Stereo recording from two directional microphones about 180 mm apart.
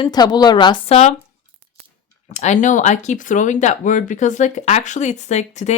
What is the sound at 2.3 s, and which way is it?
Speech, 40° left (ahead or behind).